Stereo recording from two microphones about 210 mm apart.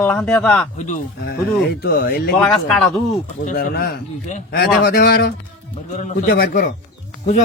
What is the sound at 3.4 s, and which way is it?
A man's voice, 45° left (ahead or behind).